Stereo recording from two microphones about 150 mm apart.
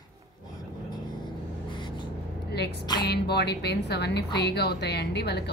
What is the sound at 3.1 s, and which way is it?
Speech, 90° left.